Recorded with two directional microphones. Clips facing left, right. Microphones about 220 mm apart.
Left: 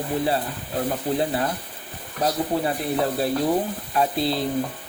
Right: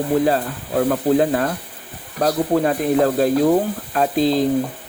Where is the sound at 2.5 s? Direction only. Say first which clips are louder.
Right 7 dB; 50° right (ahead or behind).